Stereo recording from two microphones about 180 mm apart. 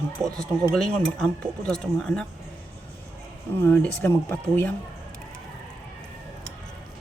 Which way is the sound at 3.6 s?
10° left (ahead or behind).